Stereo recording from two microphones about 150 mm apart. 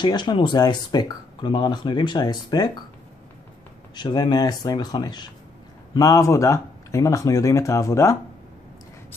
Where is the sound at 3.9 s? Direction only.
30° left (ahead or behind).